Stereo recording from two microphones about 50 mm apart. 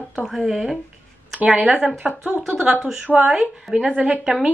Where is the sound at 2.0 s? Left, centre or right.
Centre.